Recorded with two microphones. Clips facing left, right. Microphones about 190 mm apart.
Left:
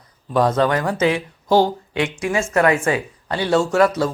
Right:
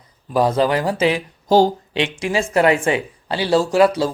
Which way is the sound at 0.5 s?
30° right (ahead or behind).